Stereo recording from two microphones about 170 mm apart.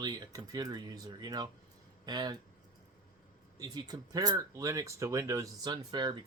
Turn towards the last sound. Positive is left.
turn(degrees=-25)  # may be behind; listen again after turning